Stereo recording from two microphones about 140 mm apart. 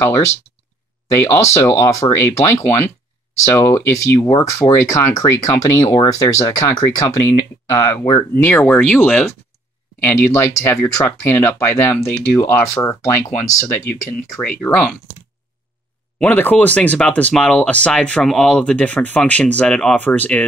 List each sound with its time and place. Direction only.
1.1 s speech: 20° left (ahead or behind)
16.2 s speech: 10° left (ahead or behind)